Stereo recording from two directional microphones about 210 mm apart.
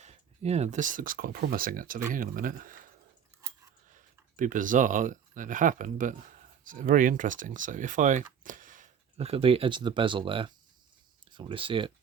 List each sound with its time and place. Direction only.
0.0 s speech: 30° right (ahead or behind)